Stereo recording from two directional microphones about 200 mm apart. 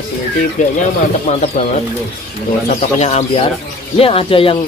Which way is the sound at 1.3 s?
35° left (ahead or behind).